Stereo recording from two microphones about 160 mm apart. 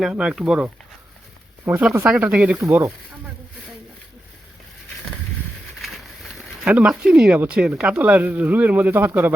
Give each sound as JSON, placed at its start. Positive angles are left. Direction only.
{"t": 0.0, "sound": "speech", "side_deg": -5}
{"t": 6.3, "sound": "speech", "side_deg": -5}